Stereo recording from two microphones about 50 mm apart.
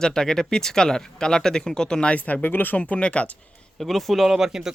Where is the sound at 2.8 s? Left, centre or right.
Left.